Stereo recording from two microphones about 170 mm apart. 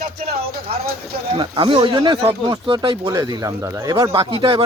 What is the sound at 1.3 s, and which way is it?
Speech, 25° right (ahead or behind).